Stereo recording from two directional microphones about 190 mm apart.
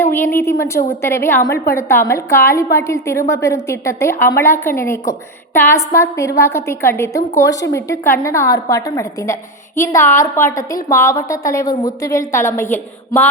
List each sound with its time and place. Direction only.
0.0 s a woman's voice: 10° left (ahead or behind)